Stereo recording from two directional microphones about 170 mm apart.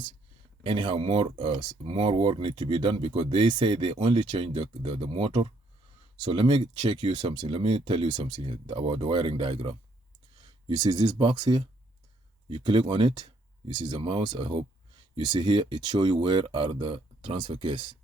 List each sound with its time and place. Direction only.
0.6 s speech: 30° right (ahead or behind)